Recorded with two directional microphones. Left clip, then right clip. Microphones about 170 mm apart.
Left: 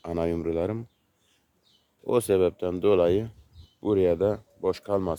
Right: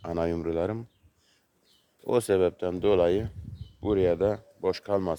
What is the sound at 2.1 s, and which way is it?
Speech, 15° left (ahead or behind).